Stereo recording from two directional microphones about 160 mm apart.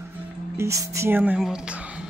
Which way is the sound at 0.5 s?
20° right (ahead or behind).